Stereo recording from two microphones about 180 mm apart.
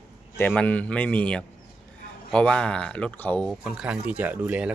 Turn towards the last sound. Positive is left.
turn(degrees=-10)  # may be behind; listen again after turning